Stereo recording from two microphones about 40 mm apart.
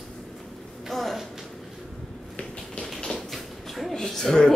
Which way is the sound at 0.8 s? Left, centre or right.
Centre.